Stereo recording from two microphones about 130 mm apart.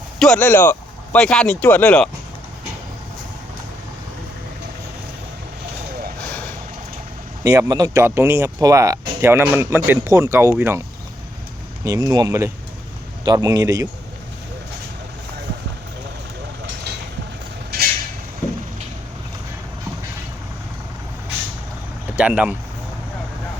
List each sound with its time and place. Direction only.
0.2 s speech: 10° left (ahead or behind)
7.4 s speech: 25° right (ahead or behind)
11.9 s speech: 30° right (ahead or behind)
22.1 s speech: 10° right (ahead or behind)